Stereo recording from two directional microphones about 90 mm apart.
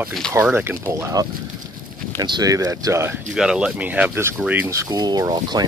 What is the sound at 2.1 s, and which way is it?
Speech, 50° right (ahead or behind).